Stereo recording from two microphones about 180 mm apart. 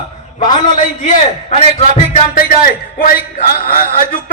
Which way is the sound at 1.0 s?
40° left (ahead or behind).